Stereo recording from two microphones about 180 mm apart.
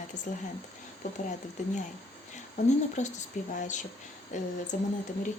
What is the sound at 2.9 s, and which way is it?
A woman's voice, 40° left (ahead or behind).